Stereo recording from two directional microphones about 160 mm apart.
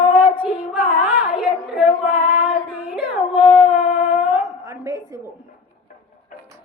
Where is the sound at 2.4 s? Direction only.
10° right (ahead or behind).